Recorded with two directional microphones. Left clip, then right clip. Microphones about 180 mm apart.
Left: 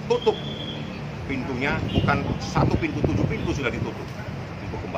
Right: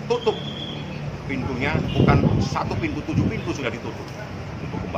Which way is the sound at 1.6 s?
5° right (ahead or behind).